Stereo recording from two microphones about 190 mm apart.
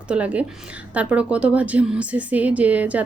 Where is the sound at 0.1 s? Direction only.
5° right (ahead or behind).